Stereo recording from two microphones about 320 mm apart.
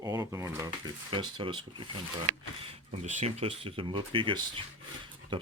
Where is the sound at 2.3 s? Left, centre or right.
Right.